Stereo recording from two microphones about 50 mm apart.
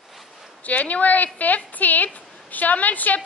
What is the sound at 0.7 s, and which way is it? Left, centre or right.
A woman's voice, left.